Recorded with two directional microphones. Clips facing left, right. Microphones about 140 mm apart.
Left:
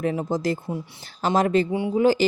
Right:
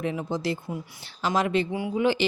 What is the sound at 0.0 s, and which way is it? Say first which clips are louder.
Speech: left 4 dB; 40° left (ahead or behind).